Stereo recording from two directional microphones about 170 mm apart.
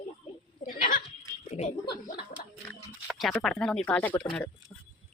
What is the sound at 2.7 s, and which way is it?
Speech, centre (ahead or behind).